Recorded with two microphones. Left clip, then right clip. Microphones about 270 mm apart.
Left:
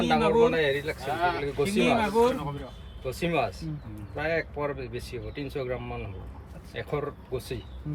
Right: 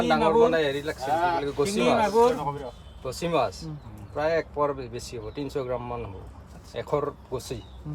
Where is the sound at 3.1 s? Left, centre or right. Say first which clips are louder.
Right 2 dB; centre.